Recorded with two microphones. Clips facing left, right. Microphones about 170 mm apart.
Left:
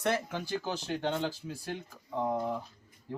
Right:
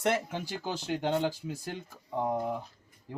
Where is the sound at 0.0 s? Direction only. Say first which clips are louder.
Right 2 dB; 20° right (ahead or behind).